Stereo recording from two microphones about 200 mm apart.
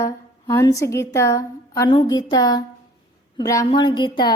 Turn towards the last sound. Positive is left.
turn(degrees=20)  # may be behind; listen again after turning